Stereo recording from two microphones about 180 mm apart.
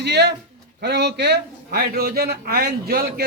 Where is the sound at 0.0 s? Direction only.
70° right (ahead or behind).